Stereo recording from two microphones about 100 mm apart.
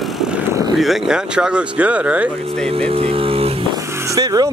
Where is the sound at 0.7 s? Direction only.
Centre (ahead or behind).